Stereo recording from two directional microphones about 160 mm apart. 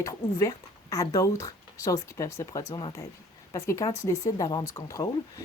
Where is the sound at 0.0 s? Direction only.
20° left (ahead or behind).